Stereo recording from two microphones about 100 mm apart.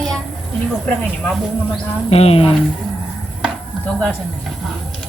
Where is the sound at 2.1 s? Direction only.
90° left.